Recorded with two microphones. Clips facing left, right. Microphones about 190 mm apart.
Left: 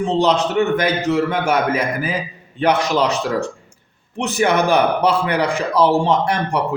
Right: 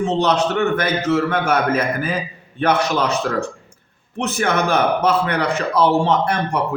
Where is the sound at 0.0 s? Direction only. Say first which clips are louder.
Left 1 dB; 15° left (ahead or behind).